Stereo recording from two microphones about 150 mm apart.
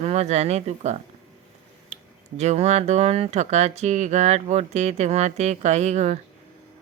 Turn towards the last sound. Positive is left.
turn(degrees=-50)  # may be behind; listen again after turning